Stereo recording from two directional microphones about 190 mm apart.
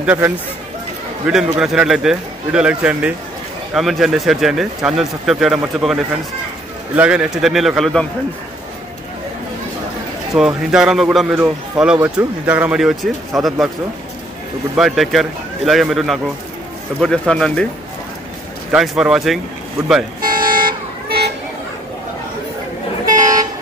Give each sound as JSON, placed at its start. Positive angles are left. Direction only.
{"t": 0.0, "sound": "speech", "side_deg": -5}
{"t": 10.3, "sound": "speech", "side_deg": -5}
{"t": 14.8, "sound": "speech", "side_deg": 0}
{"t": 18.7, "sound": "speech", "side_deg": -5}
{"t": 20.2, "sound": "vehicle", "side_deg": -50}